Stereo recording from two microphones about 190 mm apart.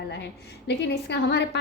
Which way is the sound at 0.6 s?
65° left (ahead or behind).